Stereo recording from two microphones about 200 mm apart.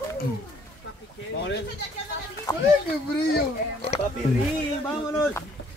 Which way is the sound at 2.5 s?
20° left (ahead or behind).